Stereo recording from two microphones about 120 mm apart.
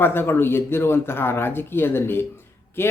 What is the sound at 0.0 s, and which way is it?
Speech, 20° left (ahead or behind).